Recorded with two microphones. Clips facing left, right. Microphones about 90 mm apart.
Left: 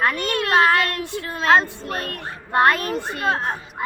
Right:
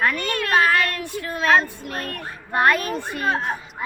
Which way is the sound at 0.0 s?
25° left (ahead or behind).